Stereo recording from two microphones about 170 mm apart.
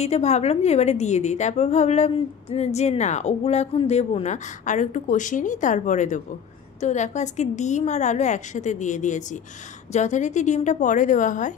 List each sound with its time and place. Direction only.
0.0 s a woman's voice: 40° left (ahead or behind)